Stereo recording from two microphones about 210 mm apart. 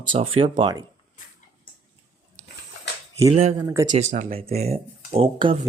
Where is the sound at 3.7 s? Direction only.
15° right (ahead or behind).